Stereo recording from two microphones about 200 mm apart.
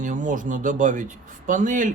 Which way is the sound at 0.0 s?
40° right (ahead or behind).